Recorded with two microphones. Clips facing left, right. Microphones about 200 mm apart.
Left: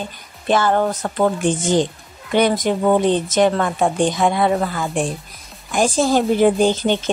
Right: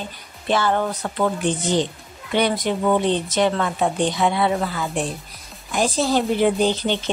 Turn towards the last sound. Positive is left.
turn(degrees=45)  # may be behind; listen again after turning